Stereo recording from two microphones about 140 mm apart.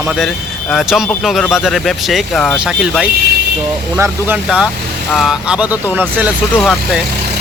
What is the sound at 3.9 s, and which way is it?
Speech, 20° right (ahead or behind).